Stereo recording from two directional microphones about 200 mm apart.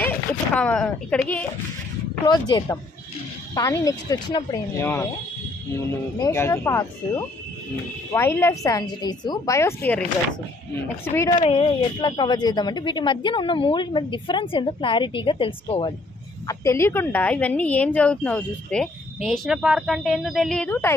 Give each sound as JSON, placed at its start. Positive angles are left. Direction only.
{"t": 0.6, "sound": "a woman's voice", "side_deg": 5}
{"t": 2.2, "sound": "speech", "side_deg": 20}
{"t": 6.1, "sound": "a woman's voice", "side_deg": 15}
{"t": 11.2, "sound": "speech", "side_deg": 35}
{"t": 16.4, "sound": "a woman's voice", "side_deg": 15}